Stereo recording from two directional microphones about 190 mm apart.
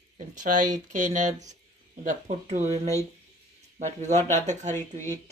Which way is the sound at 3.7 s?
40° right (ahead or behind).